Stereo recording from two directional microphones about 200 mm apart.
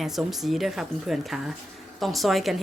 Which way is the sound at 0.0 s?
Centre (ahead or behind).